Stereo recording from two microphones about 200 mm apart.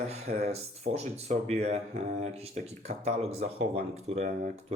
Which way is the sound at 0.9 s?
30° right (ahead or behind).